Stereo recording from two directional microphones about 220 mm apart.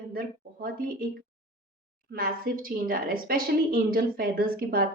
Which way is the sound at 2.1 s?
40° right (ahead or behind).